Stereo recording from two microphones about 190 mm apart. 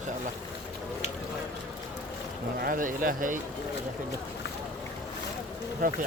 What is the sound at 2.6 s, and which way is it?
Speech, 45° right (ahead or behind).